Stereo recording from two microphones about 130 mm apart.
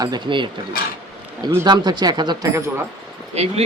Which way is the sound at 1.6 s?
35° right (ahead or behind).